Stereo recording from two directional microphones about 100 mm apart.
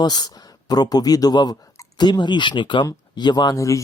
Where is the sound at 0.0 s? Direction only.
45° left (ahead or behind).